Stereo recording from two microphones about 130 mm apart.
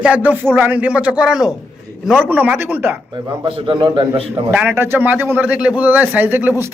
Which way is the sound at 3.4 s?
40° right (ahead or behind).